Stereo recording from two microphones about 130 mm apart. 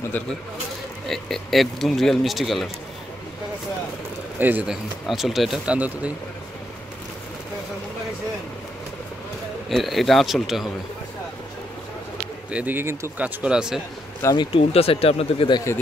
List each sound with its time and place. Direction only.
0.2 s speech: 15° left (ahead or behind)
1.0 s speech: centre (ahead or behind)
4.4 s speech: 15° right (ahead or behind)
5.0 s speech: centre (ahead or behind)
9.7 s speech: centre (ahead or behind)
12.4 s speech: 10° right (ahead or behind)
14.3 s speech: 35° left (ahead or behind)
14.7 s speech: 50° left (ahead or behind)